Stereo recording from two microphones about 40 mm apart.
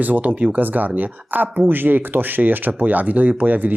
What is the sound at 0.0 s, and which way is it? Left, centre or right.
Speech, right.